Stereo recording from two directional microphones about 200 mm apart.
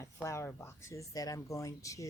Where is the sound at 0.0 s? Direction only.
15° left (ahead or behind).